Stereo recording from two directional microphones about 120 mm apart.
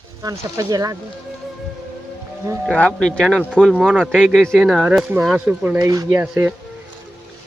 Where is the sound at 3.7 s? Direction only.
5° right (ahead or behind).